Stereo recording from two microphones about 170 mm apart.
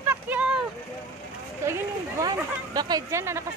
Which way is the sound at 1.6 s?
15° right (ahead or behind).